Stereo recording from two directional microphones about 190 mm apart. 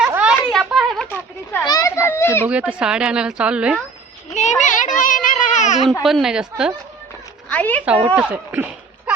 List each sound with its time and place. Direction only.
0.0 s a sound: 5° right (ahead or behind)
1.6 s children playing: 20° left (ahead or behind)
2.5 s speech: 5° right (ahead or behind)
4.4 s a sound: 40° left (ahead or behind)
5.9 s speech: centre (ahead or behind)
7.5 s a woman's voice: 10° left (ahead or behind)
8.0 s speech: 5° right (ahead or behind)